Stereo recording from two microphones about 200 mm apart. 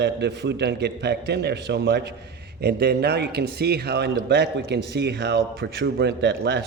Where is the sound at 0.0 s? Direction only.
60° right (ahead or behind).